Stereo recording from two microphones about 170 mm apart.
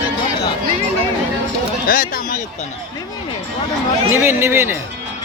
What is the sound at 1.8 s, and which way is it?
Speech, 55° left (ahead or behind).